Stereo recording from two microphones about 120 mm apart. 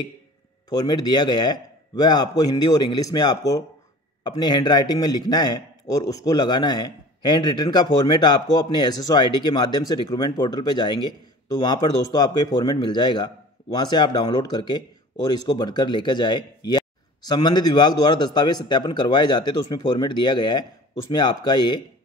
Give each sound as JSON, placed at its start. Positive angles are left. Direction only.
{"t": 0.7, "sound": "a man's voice", "side_deg": 35}